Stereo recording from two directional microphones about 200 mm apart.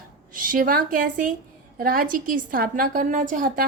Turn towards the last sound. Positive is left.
turn(degrees=-40)  # may be behind; listen again after turning